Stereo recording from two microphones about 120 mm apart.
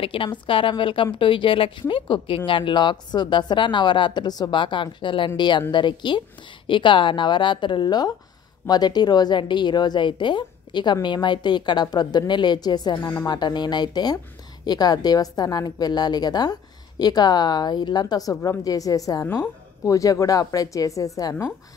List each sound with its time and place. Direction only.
0.0 s a woman's voice: 45° left (ahead or behind); by 19.2 s 30° left (ahead or behind)
19.2 s speech: 20° left (ahead or behind)